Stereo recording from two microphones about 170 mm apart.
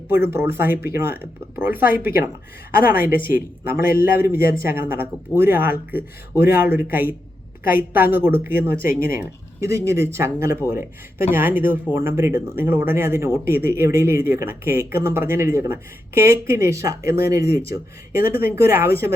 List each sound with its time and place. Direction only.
0.1 s speech: 15° right (ahead or behind)